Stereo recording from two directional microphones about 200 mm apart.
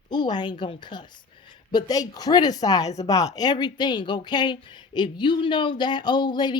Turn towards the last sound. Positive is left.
turn(degrees=20)  # may be behind; listen again after turning